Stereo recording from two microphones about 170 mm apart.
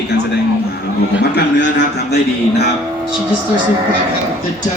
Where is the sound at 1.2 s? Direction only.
85° left.